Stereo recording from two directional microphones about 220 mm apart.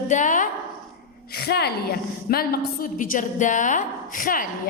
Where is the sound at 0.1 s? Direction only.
35° left (ahead or behind).